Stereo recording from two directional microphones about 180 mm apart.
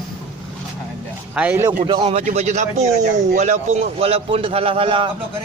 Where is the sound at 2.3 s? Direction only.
40° right (ahead or behind).